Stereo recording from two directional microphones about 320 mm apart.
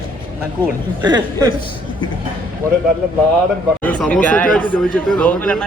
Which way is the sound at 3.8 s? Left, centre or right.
Centre.